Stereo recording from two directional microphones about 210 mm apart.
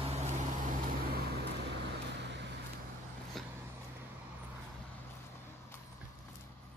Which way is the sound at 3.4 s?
Centre (ahead or behind).